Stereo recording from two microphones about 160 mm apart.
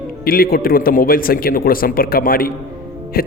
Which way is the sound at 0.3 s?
65° left (ahead or behind).